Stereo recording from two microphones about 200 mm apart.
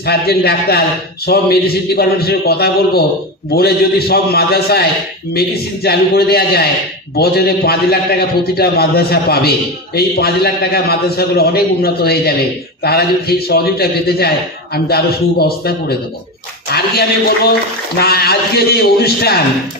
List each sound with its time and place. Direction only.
0.0 s a man's voice: 55° left (ahead or behind)
5.9 s a man's voice: 50° left (ahead or behind)
17.9 s a man's voice: 50° left (ahead or behind)